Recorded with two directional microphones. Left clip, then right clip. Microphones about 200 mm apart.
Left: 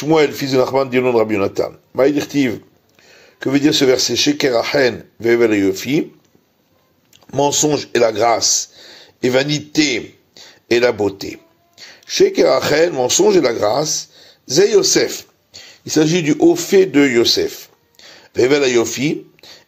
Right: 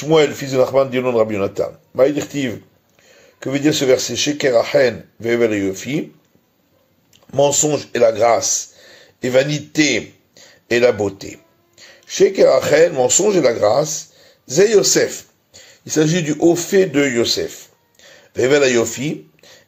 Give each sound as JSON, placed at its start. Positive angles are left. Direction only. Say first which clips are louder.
{"t": 0.0, "sound": "speech", "louder": "even", "side_deg": 25}
{"t": 7.2, "sound": "speech", "louder": "even", "side_deg": 25}